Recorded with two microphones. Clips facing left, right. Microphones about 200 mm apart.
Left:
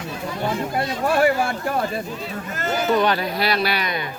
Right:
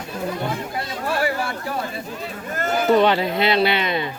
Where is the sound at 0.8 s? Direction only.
50° left (ahead or behind).